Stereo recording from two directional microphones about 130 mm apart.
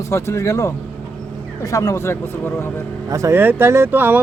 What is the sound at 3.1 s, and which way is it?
Speech, 25° right (ahead or behind).